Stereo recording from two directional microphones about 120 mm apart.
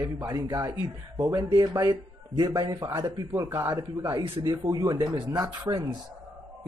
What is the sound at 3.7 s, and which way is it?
Speech, 35° right (ahead or behind).